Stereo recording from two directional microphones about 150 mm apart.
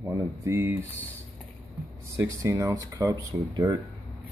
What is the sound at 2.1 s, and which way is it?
Speech, 20° right (ahead or behind).